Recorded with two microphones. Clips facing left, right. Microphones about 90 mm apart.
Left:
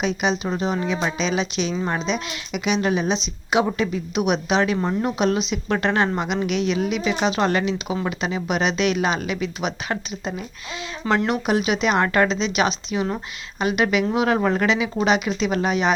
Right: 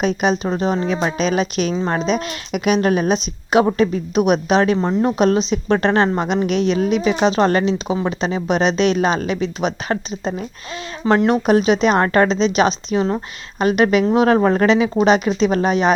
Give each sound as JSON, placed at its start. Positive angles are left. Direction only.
{"t": 0.0, "sound": "a woman's voice", "side_deg": -40}